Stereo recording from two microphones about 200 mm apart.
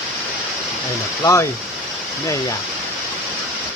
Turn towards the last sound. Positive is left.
turn(degrees=15)  # may be behind; listen again after turning